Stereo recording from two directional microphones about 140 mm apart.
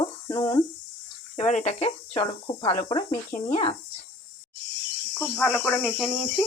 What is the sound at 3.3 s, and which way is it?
Speech, 60° left (ahead or behind).